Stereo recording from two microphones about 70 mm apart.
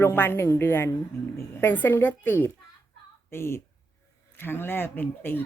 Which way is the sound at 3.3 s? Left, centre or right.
Left.